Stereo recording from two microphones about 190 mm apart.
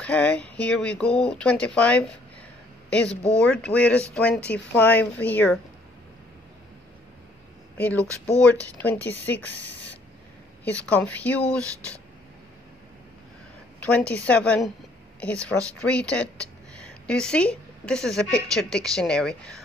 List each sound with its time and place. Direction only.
0.0 s speech: 5° left (ahead or behind)
3.3 s speech: 5° left (ahead or behind)
7.7 s speech: 5° left (ahead or behind)
8.0 s speech: 15° right (ahead or behind)
8.5 s speech: 10° left (ahead or behind)
10.6 s speech: 10° left (ahead or behind)
13.8 s a woman's voice: 5° left (ahead or behind)